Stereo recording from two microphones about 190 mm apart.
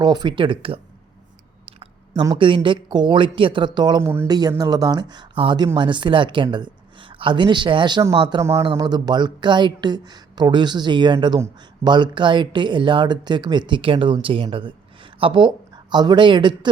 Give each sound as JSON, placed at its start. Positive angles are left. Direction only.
{"t": 0.0, "sound": "speech", "side_deg": -20}
{"t": 1.6, "sound": "chewing", "side_deg": -30}
{"t": 2.2, "sound": "speech", "side_deg": -25}